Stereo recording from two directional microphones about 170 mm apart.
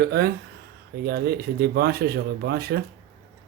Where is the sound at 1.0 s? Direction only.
70° right (ahead or behind).